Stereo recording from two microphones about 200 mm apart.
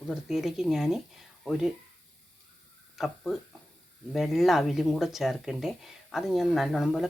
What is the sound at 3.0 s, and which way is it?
Speech, centre (ahead or behind).